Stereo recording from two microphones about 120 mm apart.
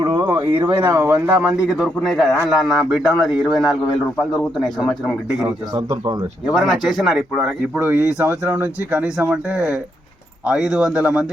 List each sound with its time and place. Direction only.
0.0 s a sound: 40° right (ahead or behind)
0.3 s speech: 40° right (ahead or behind)
0.9 s speech: 25° right (ahead or behind); by 4.9 s 5° left (ahead or behind)
5.4 s a man's voice: 25° right (ahead or behind)
6.5 s speech: centre (ahead or behind)
7.8 s speech: 15° right (ahead or behind)